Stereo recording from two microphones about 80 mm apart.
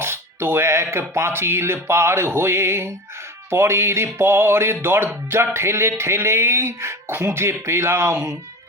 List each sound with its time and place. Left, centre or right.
0.0 s speech: right